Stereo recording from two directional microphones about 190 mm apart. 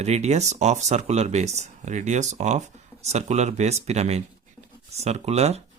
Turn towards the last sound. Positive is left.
turn(degrees=-35)  # may be behind; listen again after turning